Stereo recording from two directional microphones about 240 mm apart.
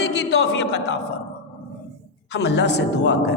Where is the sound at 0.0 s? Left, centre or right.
Left.